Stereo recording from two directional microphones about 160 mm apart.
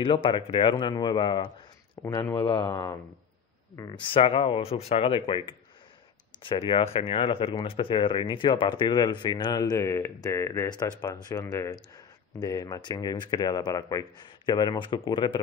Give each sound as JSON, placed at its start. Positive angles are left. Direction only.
{"t": 0.0, "sound": "speech", "side_deg": 30}
{"t": 4.0, "sound": "speech", "side_deg": 35}